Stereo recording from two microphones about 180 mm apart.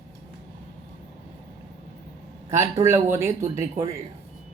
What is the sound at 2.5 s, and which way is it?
Speech, 15° right (ahead or behind).